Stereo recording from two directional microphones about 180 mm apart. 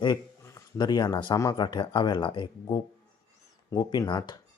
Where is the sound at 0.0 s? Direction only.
20° left (ahead or behind).